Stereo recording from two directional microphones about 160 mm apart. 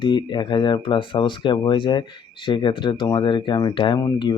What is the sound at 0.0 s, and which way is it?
Speech, 30° left (ahead or behind).